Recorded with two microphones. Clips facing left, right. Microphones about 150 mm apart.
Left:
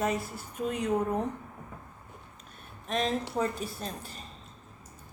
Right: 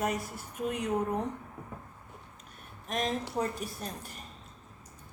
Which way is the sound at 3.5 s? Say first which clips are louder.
Left 2 dB; 25° left (ahead or behind).